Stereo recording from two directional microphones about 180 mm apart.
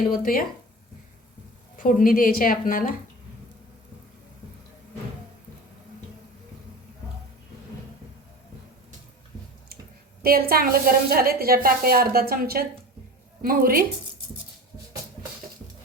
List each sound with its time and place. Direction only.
0.1 s speech: 55° left (ahead or behind)
1.8 s speech: 50° left (ahead or behind)
10.2 s a woman's voice: 55° right (ahead or behind)